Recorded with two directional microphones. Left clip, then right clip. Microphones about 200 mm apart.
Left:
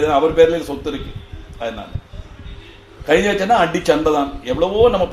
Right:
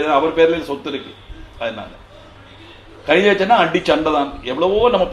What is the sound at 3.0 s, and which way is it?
A man's voice, 20° left (ahead or behind).